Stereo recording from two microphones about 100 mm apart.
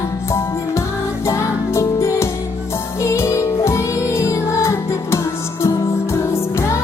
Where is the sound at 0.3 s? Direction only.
30° left (ahead or behind).